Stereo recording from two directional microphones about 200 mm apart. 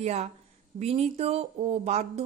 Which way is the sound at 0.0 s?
35° right (ahead or behind).